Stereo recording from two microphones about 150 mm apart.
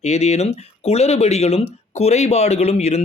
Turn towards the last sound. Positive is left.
turn(degrees=45)  # may be behind; listen again after turning